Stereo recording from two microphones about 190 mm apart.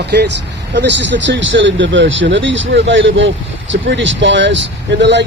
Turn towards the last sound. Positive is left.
turn(degrees=-65)  # may be behind; listen again after turning